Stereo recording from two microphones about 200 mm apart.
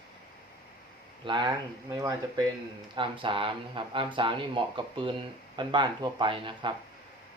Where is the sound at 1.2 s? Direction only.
20° right (ahead or behind).